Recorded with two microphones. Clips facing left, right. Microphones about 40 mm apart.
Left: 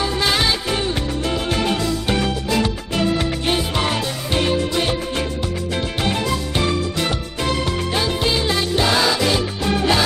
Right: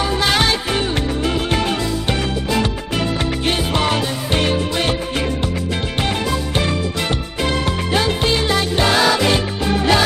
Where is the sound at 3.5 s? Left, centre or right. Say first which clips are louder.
Right 3 dB; centre.